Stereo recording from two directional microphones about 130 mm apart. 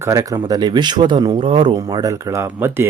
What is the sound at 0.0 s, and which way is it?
Speech, 25° right (ahead or behind).